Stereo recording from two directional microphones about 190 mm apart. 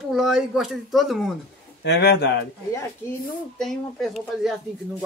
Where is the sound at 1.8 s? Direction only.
65° left (ahead or behind).